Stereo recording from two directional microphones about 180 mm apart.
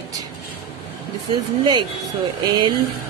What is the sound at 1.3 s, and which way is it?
Speech, 25° right (ahead or behind).